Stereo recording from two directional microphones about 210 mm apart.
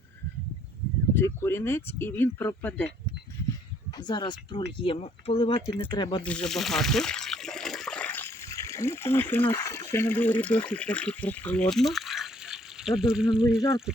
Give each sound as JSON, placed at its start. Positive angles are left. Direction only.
{"t": 1.1, "sound": "speech", "side_deg": 10}
{"t": 3.9, "sound": "speech", "side_deg": 20}
{"t": 6.2, "sound": "water", "side_deg": 5}
{"t": 9.3, "sound": "speech", "side_deg": 10}